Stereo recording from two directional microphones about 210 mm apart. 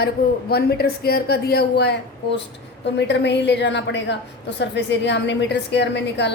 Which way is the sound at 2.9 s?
55° left (ahead or behind).